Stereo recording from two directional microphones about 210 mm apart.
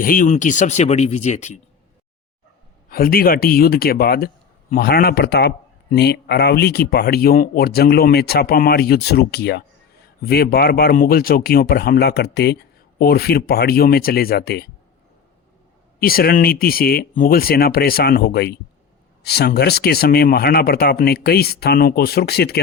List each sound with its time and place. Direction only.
0.0 s speech: 40° left (ahead or behind)
2.9 s speech: 45° left (ahead or behind)
16.0 s speech: 45° left (ahead or behind)